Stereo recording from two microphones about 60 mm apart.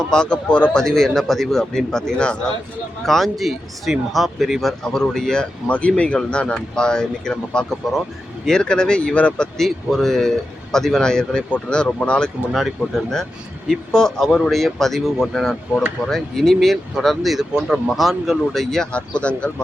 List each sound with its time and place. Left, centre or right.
0.1 s a man's voice: centre
3.0 s speech: centre
4.8 s a man's voice: centre
5.6 s a man's voice: left
9.6 s a man's voice: centre
12.5 s a man's voice: centre
18.9 s speech: centre